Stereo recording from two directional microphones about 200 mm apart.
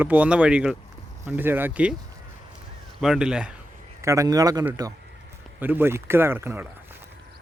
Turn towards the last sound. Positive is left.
turn(degrees=-10)  # may be behind; listen again after turning